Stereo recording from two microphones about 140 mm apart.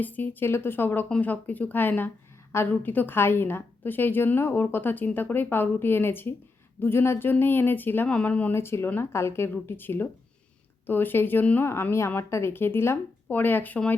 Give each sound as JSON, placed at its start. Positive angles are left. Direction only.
{"t": 0.0, "sound": "a woman's voice", "side_deg": 10}